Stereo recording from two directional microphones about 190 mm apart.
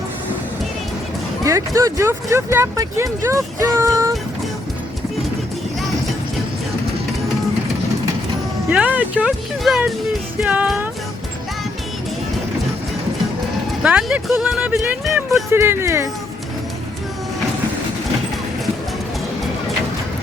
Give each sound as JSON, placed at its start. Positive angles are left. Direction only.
{"t": 1.5, "sound": "speech", "side_deg": -15}
{"t": 8.7, "sound": "speech", "side_deg": -5}
{"t": 13.8, "sound": "speech", "side_deg": -5}
{"t": 15.5, "sound": "speech", "side_deg": -15}